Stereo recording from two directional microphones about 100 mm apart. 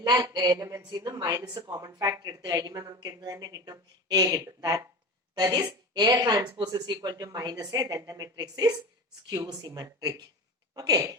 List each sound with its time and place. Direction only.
0.0 s a woman's voice: 45° right (ahead or behind)